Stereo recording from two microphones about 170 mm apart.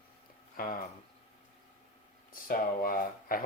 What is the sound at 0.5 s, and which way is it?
Speech, 60° left (ahead or behind).